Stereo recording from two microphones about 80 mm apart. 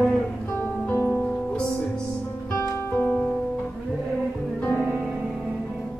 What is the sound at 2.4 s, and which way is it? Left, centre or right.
Music, left.